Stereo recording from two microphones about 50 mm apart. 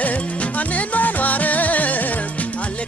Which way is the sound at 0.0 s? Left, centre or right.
Left.